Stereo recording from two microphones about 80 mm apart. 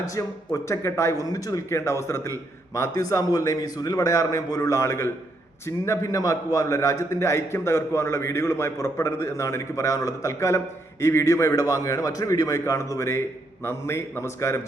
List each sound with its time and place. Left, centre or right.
0.0 s a man's voice: left